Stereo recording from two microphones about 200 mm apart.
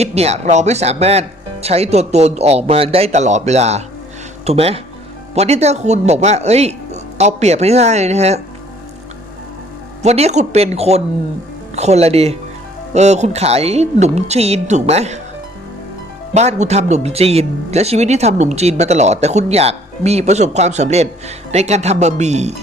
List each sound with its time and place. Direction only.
0.0 s speech: 30° right (ahead or behind)
10.0 s speech: 35° right (ahead or behind)
16.3 s speech: 35° right (ahead or behind)